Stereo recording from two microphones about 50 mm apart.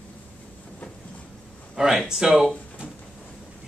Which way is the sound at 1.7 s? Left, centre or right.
Centre.